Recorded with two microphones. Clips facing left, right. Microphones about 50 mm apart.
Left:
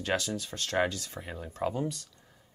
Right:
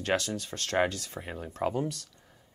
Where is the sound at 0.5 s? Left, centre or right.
Centre.